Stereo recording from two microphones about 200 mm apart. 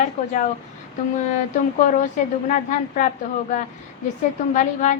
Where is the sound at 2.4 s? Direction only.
40° left (ahead or behind).